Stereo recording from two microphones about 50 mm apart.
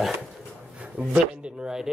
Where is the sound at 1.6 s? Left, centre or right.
Centre.